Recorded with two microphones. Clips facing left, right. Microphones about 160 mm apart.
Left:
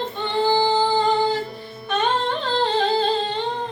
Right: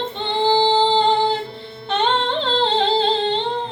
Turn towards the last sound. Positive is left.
turn(degrees=-25)  # may be behind; listen again after turning